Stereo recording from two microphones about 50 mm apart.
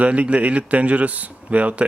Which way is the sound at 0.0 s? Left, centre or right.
Right.